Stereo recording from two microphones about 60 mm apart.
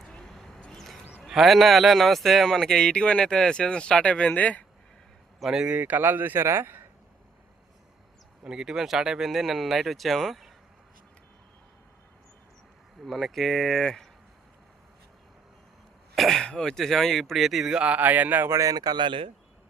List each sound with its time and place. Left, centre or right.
0.0 s a sound: centre
1.2 s speech: centre; by 4.6 s left
5.4 s speech: centre
5.7 s speech: right
8.4 s speech: centre
13.1 s speech: centre
16.1 s throat clearing: centre
16.5 s speech: centre
17.7 s speech: right
18.6 s speech: right